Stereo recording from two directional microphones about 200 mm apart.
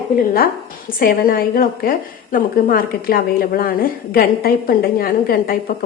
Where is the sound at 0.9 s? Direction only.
45° left (ahead or behind).